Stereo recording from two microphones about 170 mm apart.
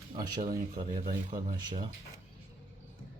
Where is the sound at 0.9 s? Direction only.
25° right (ahead or behind).